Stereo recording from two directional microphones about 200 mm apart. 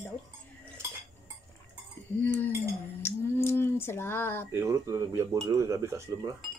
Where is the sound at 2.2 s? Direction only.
10° left (ahead or behind).